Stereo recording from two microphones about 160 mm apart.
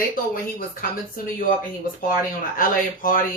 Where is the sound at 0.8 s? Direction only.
60° left (ahead or behind).